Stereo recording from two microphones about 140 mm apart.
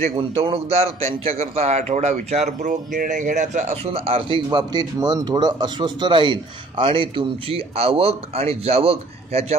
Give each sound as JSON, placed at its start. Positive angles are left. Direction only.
{"t": 0.4, "sound": "a man's voice", "side_deg": -45}
{"t": 3.9, "sound": "a man's voice", "side_deg": -45}
{"t": 4.5, "sound": "a man's voice", "side_deg": -30}